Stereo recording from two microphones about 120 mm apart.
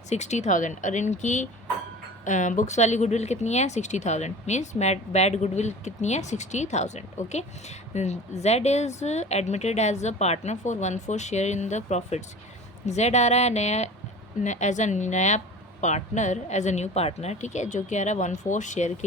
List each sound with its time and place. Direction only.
0.1 s a woman's voice: 70° left (ahead or behind)
14.4 s a woman's voice: 80° left